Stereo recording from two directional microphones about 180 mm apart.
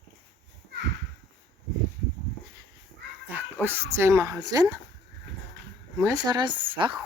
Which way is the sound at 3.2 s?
10° right (ahead or behind).